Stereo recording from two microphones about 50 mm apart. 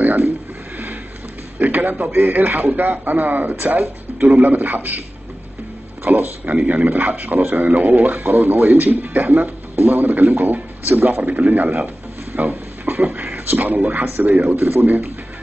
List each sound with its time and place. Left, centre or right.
0.0 s a sound: right
1.6 s speech: right
6.0 s speech: right